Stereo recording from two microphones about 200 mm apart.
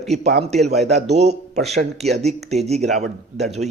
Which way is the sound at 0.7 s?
35° right (ahead or behind).